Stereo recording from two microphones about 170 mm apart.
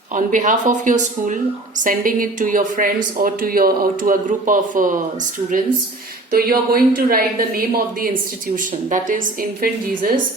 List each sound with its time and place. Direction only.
0.1 s speech: 50° right (ahead or behind)
6.3 s speech: 60° right (ahead or behind)